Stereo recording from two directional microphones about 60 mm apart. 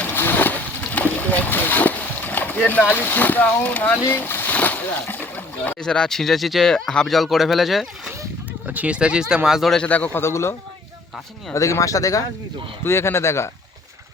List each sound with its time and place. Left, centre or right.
0.1 s boat: left
2.9 s speech: left
5.8 s speech: centre
8.6 s speech: right
9.0 s speech: centre
9.7 s a man's voice: left
10.1 s speech: left
11.5 s speech: left
12.8 s speech: left